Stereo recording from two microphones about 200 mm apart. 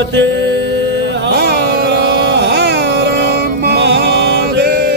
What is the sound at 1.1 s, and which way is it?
Music, 55° right (ahead or behind).